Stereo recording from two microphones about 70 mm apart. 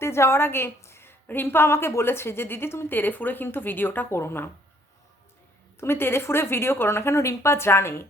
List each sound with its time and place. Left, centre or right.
0.0 s a woman's voice: left
5.8 s a woman's voice: left